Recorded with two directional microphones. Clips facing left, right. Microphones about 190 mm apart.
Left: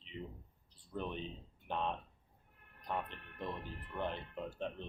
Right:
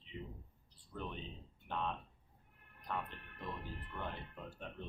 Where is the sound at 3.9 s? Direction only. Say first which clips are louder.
Left 6 dB; 25° left (ahead or behind).